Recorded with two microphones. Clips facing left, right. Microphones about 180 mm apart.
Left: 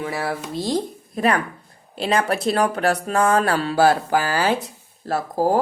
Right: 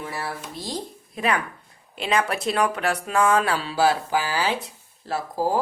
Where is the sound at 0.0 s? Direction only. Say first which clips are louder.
Left 6 dB; 90° left; by 0.8 s 75° left (ahead or behind).